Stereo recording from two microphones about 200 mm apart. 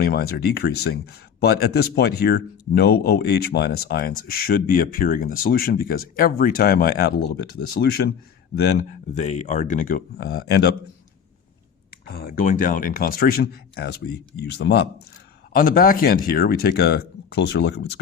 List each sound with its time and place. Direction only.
0.0 s speech: 50° left (ahead or behind)
8.6 s speech: 40° left (ahead or behind)
10.5 s a man's voice: 55° left (ahead or behind)
12.0 s speech: 50° left (ahead or behind)
15.5 s speech: 45° left (ahead or behind)